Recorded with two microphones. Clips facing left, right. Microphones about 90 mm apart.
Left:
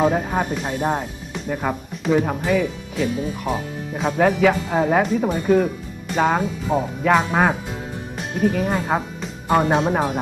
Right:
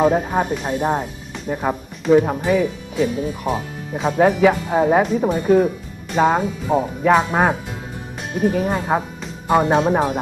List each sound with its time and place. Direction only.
0.0 s speech: 10° right (ahead or behind)
8.5 s speech: 10° right (ahead or behind)